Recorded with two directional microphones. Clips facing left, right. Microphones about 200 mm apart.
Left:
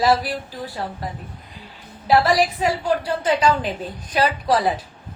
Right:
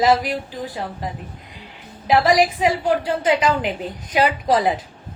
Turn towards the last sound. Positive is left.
turn(degrees=-15)  # may be behind; listen again after turning